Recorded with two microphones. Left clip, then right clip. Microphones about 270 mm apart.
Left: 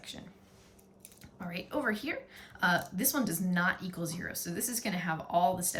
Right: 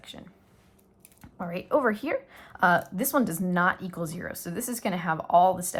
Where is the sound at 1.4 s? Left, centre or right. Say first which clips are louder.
Right 10 dB; centre.